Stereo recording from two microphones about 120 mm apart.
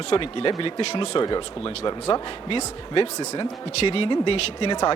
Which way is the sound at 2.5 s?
50° left (ahead or behind).